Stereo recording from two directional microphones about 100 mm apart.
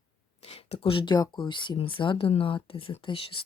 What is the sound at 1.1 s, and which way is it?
Speech, 45° left (ahead or behind).